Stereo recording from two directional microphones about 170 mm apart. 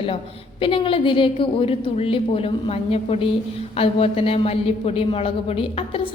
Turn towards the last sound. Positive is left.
turn(degrees=30)  # may be behind; listen again after turning